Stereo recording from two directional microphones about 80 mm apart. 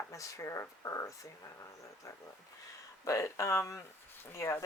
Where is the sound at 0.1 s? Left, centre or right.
Left.